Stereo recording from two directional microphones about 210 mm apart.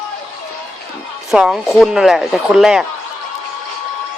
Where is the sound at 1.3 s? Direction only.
5° right (ahead or behind).